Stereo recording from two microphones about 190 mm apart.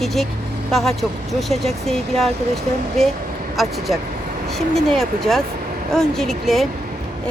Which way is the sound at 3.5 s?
Centre (ahead or behind).